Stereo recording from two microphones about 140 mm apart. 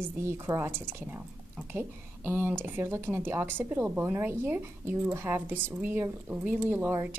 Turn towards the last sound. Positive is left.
turn(degrees=-15)  # may be behind; listen again after turning